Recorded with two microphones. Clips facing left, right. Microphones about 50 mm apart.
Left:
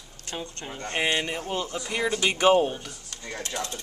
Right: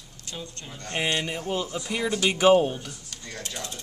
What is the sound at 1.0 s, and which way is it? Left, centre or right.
Speech, centre.